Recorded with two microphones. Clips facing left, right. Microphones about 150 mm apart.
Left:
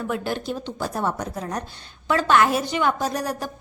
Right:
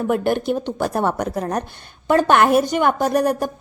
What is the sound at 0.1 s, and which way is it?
A woman's voice, 55° right (ahead or behind).